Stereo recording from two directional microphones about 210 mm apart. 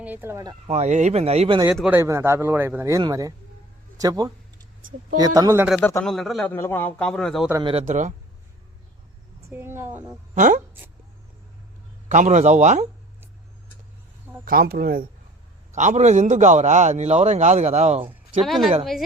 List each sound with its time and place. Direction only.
0.0 s speech: 10° right (ahead or behind)
0.7 s a man's voice: 35° right (ahead or behind)
1.7 s speech: 5° right (ahead or behind)
5.8 s a man's voice: 5° left (ahead or behind)
7.5 s a man's voice: 25° right (ahead or behind)
9.5 s speech: 10° right (ahead or behind)
10.3 s speech: 35° right (ahead or behind)
12.0 s a man's voice: 35° right (ahead or behind)
14.4 s speech: 45° right (ahead or behind)
15.7 s a man's voice: 35° right (ahead or behind)
18.4 s a man's voice: centre (ahead or behind)